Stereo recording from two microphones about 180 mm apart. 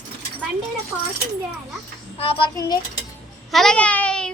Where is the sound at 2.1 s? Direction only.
30° left (ahead or behind).